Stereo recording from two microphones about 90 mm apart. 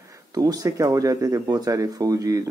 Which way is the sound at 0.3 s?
45° right (ahead or behind).